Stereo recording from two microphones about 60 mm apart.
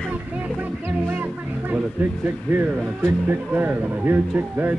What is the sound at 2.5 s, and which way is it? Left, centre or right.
Speech, right.